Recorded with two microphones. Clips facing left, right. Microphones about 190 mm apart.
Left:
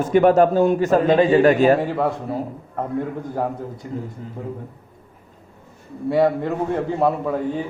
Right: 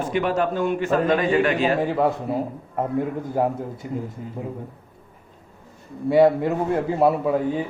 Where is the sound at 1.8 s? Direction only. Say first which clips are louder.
Right 1 dB; centre (ahead or behind).